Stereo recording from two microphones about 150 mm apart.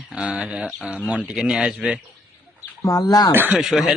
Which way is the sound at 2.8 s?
25° left (ahead or behind).